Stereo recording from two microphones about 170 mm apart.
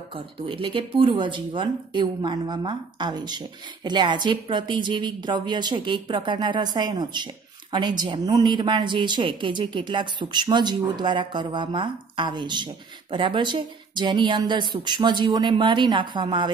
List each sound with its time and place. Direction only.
0.1 s a woman's voice: 30° right (ahead or behind)